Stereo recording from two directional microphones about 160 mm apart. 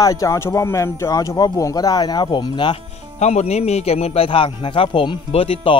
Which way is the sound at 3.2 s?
45° left (ahead or behind).